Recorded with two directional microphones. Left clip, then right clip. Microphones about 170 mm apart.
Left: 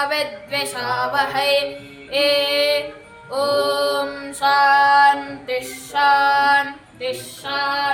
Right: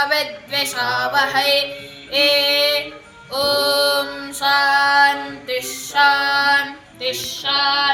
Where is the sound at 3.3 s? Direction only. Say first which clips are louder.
Right 1 dB; 55° left (ahead or behind).